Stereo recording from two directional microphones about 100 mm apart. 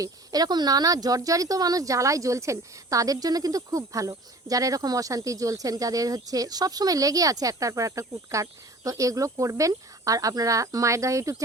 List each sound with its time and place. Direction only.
0.0 s speech: 40° right (ahead or behind)